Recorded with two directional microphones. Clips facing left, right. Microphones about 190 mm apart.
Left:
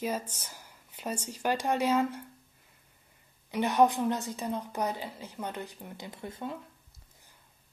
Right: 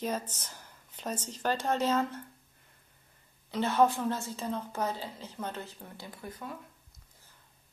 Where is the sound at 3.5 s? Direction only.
15° left (ahead or behind).